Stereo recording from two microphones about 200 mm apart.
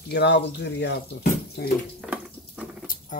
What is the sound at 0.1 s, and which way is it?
Speech, 60° left (ahead or behind).